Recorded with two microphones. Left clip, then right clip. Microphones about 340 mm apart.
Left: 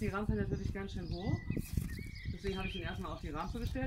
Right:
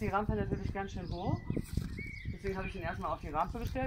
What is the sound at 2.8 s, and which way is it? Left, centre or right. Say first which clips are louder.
Speech: right 6 dB; centre.